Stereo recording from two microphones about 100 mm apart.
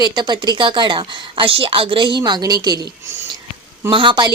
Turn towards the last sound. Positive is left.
turn(degrees=-55)  # may be behind; listen again after turning